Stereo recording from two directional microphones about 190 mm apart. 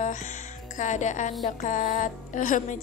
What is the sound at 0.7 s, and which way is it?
A woman's voice, 40° left (ahead or behind).